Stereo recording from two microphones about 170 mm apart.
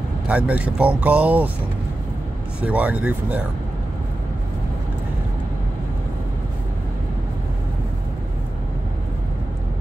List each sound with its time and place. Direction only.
0.3 s speech: 5° right (ahead or behind)
2.6 s speech: 10° right (ahead or behind)